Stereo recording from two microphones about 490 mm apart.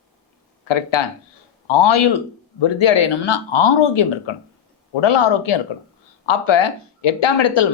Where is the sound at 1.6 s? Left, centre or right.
Left.